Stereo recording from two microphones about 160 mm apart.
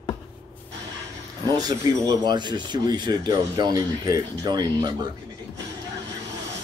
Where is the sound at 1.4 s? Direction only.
25° right (ahead or behind).